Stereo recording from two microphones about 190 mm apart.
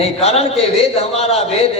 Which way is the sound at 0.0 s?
30° left (ahead or behind).